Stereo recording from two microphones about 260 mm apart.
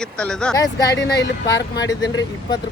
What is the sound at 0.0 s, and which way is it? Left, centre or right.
Speech, centre.